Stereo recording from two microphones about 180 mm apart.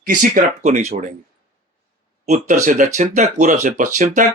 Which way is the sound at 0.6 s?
40° right (ahead or behind).